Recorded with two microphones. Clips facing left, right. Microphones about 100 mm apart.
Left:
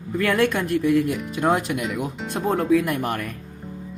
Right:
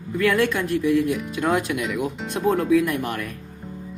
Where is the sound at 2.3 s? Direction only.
40° left (ahead or behind).